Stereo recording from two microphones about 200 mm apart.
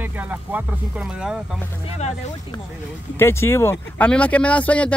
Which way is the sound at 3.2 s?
10° left (ahead or behind).